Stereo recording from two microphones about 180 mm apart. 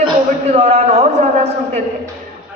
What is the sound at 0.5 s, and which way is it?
A woman's voice, 35° right (ahead or behind).